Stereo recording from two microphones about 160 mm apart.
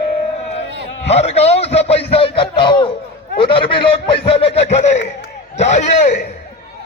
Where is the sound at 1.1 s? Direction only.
40° left (ahead or behind).